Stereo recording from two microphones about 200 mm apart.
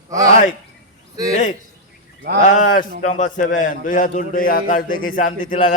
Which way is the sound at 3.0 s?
40° left (ahead or behind).